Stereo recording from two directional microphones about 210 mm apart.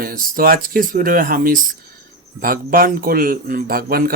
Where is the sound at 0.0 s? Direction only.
45° right (ahead or behind).